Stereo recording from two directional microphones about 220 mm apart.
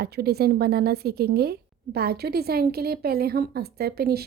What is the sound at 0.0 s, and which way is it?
A woman's voice, 45° right (ahead or behind).